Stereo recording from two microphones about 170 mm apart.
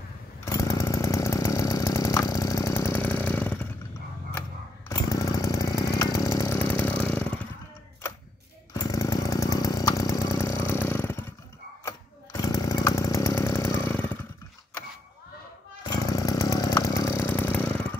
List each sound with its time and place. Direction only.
0.5 s chainsaw: 20° left (ahead or behind)
4.8 s chainsaw: 20° left (ahead or behind)
8.7 s chainsaw: 20° left (ahead or behind)
15.8 s chainsaw: 20° left (ahead or behind)